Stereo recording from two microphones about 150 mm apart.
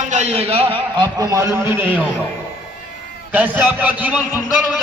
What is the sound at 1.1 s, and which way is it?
Speech, 25° right (ahead or behind).